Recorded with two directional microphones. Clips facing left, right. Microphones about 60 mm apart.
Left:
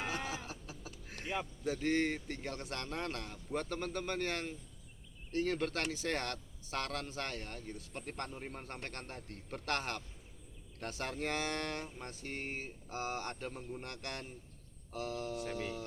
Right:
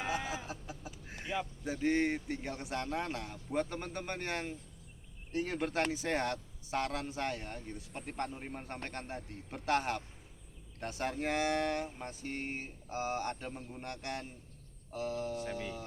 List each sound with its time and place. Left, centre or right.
0.0 s a sound: centre
1.6 s speech: centre
14.9 s speech: centre